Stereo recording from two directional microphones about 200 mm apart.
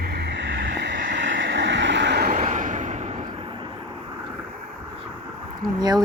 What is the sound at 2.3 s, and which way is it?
Vehicle, 40° right (ahead or behind).